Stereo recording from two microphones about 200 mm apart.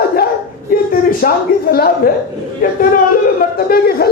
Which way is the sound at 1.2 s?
50° left (ahead or behind).